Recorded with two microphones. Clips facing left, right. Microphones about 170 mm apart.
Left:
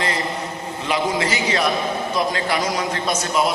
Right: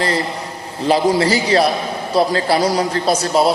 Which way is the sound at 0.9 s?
35° right (ahead or behind).